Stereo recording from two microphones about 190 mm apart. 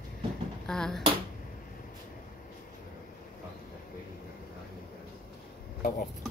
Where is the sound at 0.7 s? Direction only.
5° left (ahead or behind).